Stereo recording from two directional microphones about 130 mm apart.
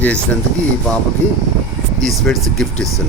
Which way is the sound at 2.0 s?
5° left (ahead or behind).